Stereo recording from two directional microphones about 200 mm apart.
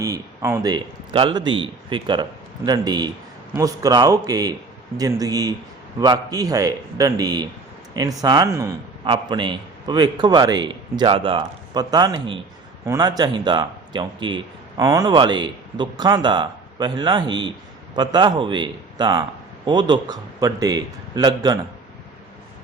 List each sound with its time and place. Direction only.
0.0 s a man's voice: 15° right (ahead or behind)